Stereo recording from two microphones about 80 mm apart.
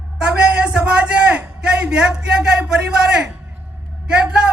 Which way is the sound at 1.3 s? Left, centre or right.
Centre.